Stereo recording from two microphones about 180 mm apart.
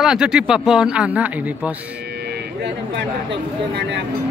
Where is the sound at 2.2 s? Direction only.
70° right (ahead or behind).